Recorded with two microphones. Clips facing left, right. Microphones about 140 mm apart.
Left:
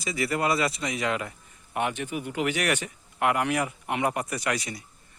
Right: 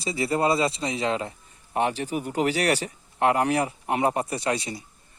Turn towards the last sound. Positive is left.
turn(degrees=-25)  # may be behind; listen again after turning